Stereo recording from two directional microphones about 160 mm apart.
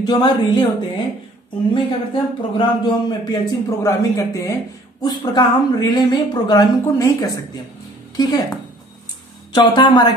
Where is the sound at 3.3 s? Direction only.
20° left (ahead or behind).